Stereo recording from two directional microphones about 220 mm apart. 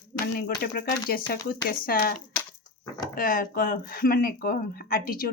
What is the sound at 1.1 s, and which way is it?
Speech, 40° left (ahead or behind).